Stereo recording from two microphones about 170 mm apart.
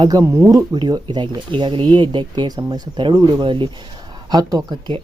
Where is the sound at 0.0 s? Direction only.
20° right (ahead or behind).